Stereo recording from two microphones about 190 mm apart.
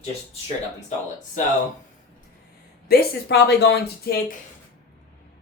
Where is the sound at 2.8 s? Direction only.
55° left (ahead or behind).